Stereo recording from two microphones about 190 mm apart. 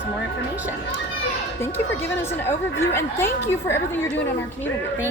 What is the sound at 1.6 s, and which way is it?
A woman's voice, 10° left (ahead or behind).